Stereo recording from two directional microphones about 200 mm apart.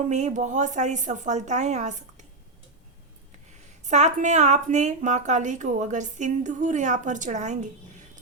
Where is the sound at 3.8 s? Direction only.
35° right (ahead or behind).